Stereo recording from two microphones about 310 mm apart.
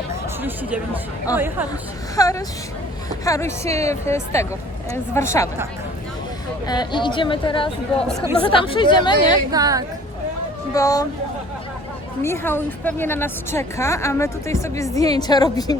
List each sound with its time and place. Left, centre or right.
1.3 s a woman's voice: centre
6.7 s a woman's voice: centre
9.5 s a woman's voice: centre
10.8 s a woman's voice: centre
12.2 s a woman's voice: centre